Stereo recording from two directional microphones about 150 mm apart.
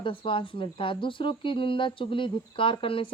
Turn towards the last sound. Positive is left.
turn(degrees=35)  # may be behind; listen again after turning